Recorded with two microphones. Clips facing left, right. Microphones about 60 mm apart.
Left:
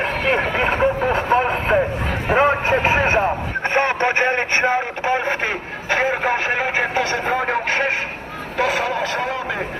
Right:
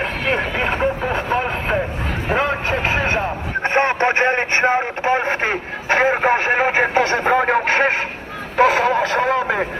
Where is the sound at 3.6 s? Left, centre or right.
Right.